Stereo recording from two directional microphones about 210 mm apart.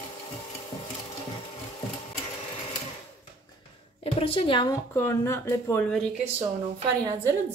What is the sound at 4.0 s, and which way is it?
A woman's voice, 25° left (ahead or behind).